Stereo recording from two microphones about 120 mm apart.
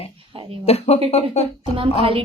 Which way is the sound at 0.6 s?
60° left (ahead or behind).